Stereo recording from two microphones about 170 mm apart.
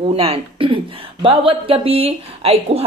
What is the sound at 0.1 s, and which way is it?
A woman's voice, 35° right (ahead or behind).